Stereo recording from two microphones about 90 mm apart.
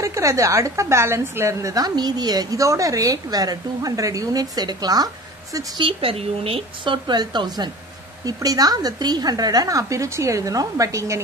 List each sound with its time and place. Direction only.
0.0 s a woman's voice: 35° right (ahead or behind)
5.8 s a woman's voice: 90° right; by 11.1 s 35° right (ahead or behind)